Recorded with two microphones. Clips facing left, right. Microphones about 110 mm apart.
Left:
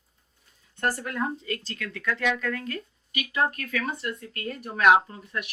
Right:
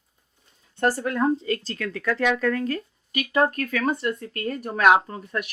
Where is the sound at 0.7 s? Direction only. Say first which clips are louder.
Right 5 dB; 30° right (ahead or behind).